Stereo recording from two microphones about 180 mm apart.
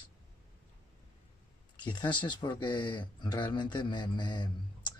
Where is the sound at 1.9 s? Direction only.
25° left (ahead or behind).